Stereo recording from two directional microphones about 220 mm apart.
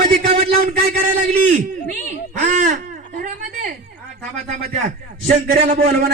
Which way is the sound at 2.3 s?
35° right (ahead or behind).